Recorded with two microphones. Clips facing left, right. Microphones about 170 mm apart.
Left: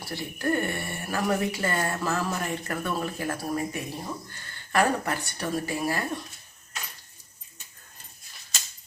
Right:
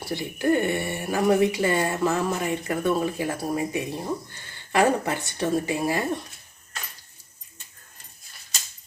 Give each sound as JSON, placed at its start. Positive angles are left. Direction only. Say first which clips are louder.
{"t": 0.1, "sound": "a woman's voice", "louder": "right 5 dB", "side_deg": -20}